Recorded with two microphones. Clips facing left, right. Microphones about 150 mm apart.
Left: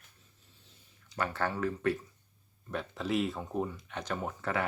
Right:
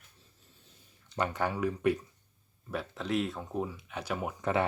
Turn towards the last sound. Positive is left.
turn(degrees=-10)  # may be behind; listen again after turning